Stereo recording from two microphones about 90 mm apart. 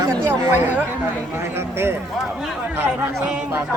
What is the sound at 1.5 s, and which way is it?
Speech, 25° right (ahead or behind).